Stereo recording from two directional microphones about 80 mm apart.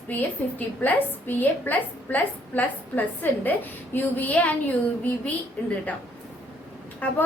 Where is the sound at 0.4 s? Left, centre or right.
Left.